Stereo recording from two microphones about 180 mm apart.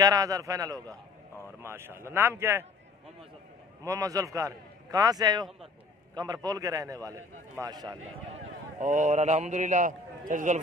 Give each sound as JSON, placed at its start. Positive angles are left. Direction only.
{"t": 0.0, "sound": "a man's voice", "side_deg": -20}
{"t": 3.8, "sound": "a man's voice", "side_deg": -15}
{"t": 8.7, "sound": "a man's voice", "side_deg": -40}